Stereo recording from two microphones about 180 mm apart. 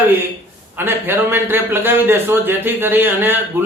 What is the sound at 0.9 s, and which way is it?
Speech, 10° right (ahead or behind).